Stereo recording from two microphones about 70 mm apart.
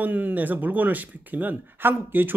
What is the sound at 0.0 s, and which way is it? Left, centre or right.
Speech, right.